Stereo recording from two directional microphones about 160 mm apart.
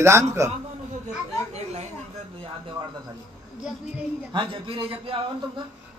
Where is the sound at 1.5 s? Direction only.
45° right (ahead or behind).